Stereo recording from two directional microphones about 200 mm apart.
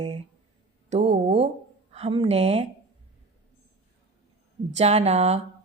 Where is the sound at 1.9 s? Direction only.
30° right (ahead or behind).